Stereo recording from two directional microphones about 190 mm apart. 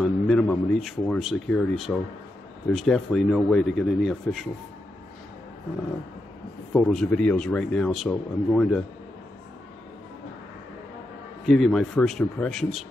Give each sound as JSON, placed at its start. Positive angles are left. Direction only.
{"t": 0.0, "sound": "a man's voice", "side_deg": 5}
{"t": 6.7, "sound": "a man's voice", "side_deg": 5}
{"t": 11.4, "sound": "a man's voice", "side_deg": 0}